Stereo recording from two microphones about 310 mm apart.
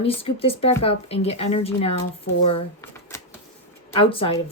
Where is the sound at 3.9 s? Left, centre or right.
Centre.